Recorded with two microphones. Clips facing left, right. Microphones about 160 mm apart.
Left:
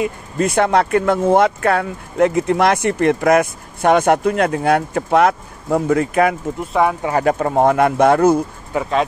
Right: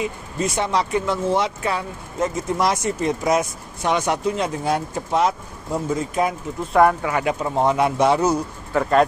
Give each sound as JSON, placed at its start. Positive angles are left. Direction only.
{"t": 0.0, "sound": "speech", "side_deg": 55}
{"t": 6.7, "sound": "speech", "side_deg": 0}
{"t": 7.0, "sound": "speech", "side_deg": 30}
{"t": 7.2, "sound": "speech", "side_deg": 55}
{"t": 8.7, "sound": "speech", "side_deg": 10}